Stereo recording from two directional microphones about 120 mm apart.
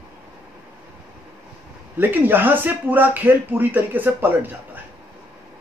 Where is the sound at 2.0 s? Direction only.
15° right (ahead or behind).